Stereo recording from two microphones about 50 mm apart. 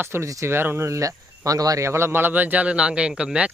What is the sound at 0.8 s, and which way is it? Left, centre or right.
Speech, right.